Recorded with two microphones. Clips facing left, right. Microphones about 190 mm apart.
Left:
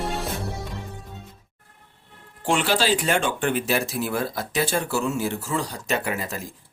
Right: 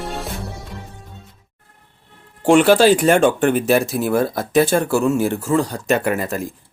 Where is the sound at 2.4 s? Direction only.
50° right (ahead or behind).